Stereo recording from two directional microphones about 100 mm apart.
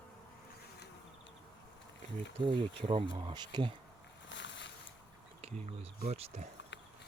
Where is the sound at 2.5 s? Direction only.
50° right (ahead or behind).